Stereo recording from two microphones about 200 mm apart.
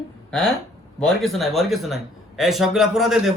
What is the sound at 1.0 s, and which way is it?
A man's voice, centre (ahead or behind).